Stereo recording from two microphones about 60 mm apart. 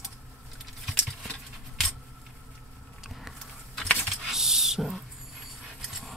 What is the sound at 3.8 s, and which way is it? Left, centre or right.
Typing, centre.